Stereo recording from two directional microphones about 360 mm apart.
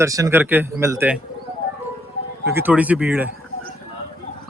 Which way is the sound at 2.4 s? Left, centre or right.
Centre.